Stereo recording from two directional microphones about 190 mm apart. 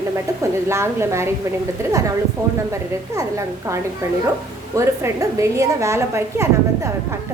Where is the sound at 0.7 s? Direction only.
15° right (ahead or behind).